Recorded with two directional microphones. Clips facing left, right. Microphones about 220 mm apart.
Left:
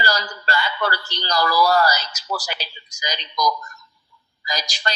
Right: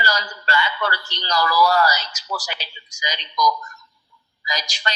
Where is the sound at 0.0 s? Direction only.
35° left (ahead or behind).